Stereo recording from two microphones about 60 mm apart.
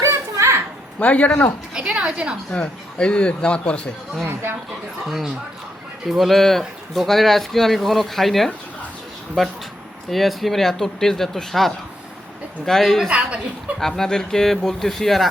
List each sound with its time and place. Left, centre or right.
0.0 s children playing: right
0.9 s speech: left
1.8 s a sound: centre
2.5 s speech: centre
5.0 s speech: centre
10.1 s speech: centre
13.1 s a woman's voice: centre
13.7 s speech: centre